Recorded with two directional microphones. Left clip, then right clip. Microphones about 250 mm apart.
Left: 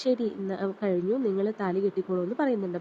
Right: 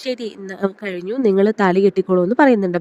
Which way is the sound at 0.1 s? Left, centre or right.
Right.